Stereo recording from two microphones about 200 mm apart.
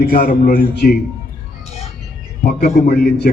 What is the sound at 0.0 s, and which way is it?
Speech, 50° left (ahead or behind).